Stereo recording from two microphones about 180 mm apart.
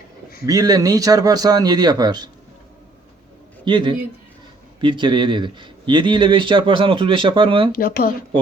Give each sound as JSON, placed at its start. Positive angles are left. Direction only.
{"t": 0.4, "sound": "speech", "side_deg": -20}
{"t": 3.6, "sound": "speech", "side_deg": -25}
{"t": 7.7, "sound": "speech", "side_deg": 55}